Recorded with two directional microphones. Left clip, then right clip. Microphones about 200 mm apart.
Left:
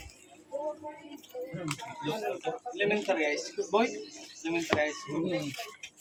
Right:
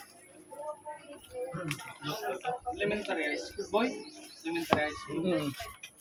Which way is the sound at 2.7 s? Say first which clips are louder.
Left 8 dB; 50° left (ahead or behind).